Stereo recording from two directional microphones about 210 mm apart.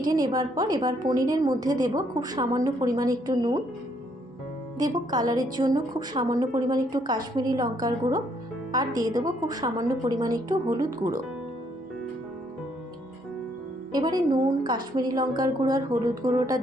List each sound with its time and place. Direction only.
0.0 s a woman's voice: 20° right (ahead or behind)
4.8 s a woman's voice: 20° right (ahead or behind)
13.9 s a woman's voice: 20° right (ahead or behind)